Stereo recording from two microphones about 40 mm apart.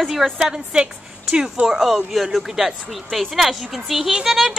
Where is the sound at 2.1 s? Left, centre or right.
Centre.